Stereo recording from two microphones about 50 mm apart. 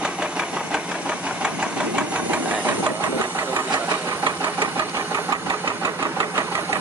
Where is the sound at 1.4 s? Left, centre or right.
Right.